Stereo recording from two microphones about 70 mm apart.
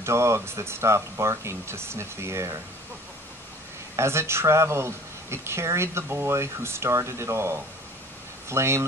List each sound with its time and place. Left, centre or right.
0.0 s speech: right
3.9 s speech: right